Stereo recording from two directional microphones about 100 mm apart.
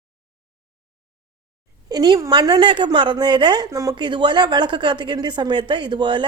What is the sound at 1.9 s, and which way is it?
Speech, 45° right (ahead or behind).